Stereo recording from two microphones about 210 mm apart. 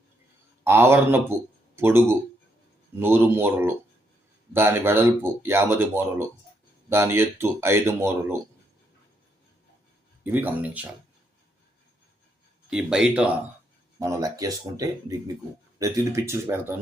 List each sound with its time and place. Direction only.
0.6 s speech: 10° right (ahead or behind)
10.2 s speech: 10° right (ahead or behind)
12.7 s speech: 5° right (ahead or behind)
14.0 s speech: 15° right (ahead or behind)